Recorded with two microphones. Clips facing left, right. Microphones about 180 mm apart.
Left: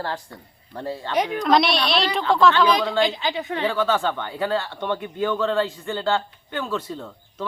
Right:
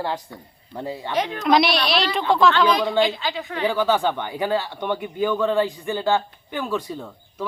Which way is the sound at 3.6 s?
15° right (ahead or behind).